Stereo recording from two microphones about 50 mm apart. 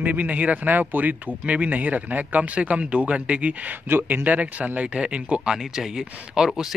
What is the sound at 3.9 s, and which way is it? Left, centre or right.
Speech, right.